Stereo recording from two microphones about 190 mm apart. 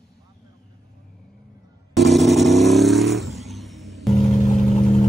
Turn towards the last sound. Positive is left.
turn(degrees=35)  # may be behind; listen again after turning